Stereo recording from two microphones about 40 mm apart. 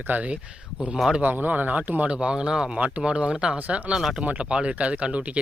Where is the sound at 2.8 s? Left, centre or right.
Right.